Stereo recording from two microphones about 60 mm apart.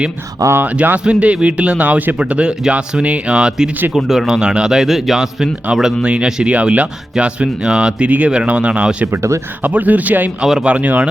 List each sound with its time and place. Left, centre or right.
0.6 s speech: right
1.0 s speech: centre
2.1 s speech: centre
6.1 s speech: centre
10.4 s speech: centre
10.7 s speech: right